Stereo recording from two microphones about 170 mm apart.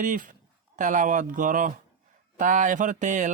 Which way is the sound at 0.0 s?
50° right (ahead or behind).